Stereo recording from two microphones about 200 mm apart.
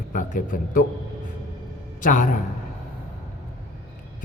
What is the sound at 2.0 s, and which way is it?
Speech, 40° left (ahead or behind).